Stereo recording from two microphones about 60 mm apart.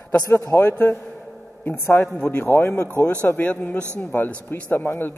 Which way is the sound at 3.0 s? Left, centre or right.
Left.